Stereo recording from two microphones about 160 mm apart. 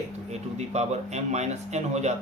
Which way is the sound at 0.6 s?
45° right (ahead or behind).